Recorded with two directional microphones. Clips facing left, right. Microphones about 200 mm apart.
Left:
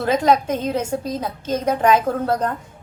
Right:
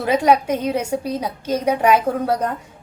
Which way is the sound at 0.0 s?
10° right (ahead or behind).